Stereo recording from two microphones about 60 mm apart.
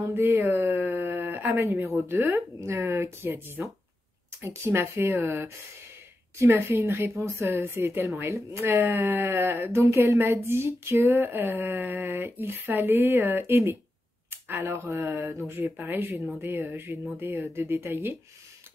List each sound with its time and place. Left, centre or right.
0.0 s speech: right
0.9 s a sound: right
1.6 s speech: right
2.0 s speech: right
4.7 s speech: right
6.3 s speech: right
9.8 s speech: right
11.2 s speech: right
14.3 s a sound: right
14.7 s speech: right
15.0 s speech: right
15.4 s speech: right
17.2 s speech: right
17.6 s speech: right